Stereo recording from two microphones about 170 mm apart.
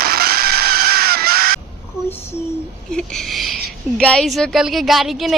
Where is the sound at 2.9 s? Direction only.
5° left (ahead or behind).